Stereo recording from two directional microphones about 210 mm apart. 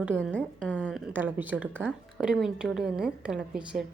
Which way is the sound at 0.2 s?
5° left (ahead or behind).